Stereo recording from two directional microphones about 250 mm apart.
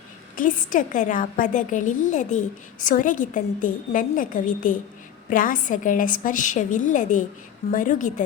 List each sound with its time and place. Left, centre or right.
0.3 s a woman's voice: left